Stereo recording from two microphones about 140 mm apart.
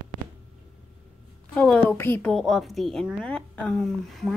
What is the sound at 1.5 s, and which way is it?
A woman's voice, 10° left (ahead or behind).